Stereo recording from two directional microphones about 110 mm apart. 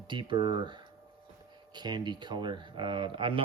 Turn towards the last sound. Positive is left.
turn(degrees=-50)  # may be behind; listen again after turning